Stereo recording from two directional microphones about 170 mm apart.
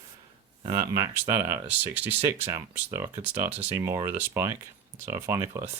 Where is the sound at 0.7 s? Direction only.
20° right (ahead or behind).